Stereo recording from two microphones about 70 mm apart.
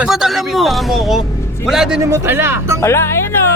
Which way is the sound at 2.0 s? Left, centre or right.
Right.